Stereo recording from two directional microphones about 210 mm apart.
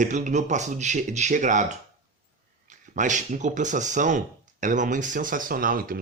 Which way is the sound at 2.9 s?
35° right (ahead or behind).